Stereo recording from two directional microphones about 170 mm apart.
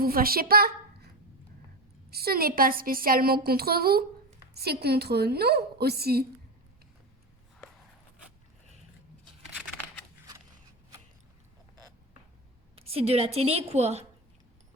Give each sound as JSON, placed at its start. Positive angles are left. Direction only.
{"t": 0.0, "sound": "a woman's voice", "side_deg": -60}
{"t": 2.0, "sound": "a woman's voice", "side_deg": -65}
{"t": 12.7, "sound": "a woman's voice", "side_deg": -35}